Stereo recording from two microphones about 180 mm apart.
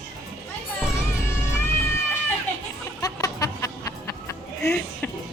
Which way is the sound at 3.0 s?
20° left (ahead or behind).